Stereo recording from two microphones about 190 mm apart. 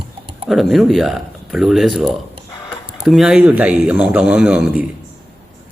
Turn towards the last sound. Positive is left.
turn(degrees=-5)  # may be behind; listen again after turning